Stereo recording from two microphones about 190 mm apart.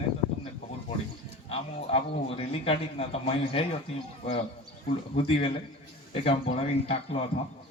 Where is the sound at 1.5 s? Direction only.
30° left (ahead or behind).